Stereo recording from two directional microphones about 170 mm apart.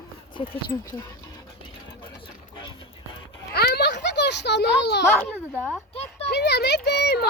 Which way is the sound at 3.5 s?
70° left (ahead or behind).